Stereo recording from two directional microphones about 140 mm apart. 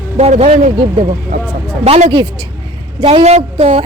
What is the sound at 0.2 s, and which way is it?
Speech, 50° right (ahead or behind).